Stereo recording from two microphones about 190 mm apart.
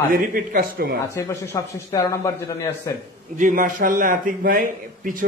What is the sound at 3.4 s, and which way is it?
A man's voice, 45° right (ahead or behind).